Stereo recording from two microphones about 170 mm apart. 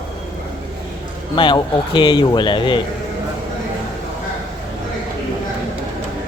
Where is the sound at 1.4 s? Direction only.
30° left (ahead or behind).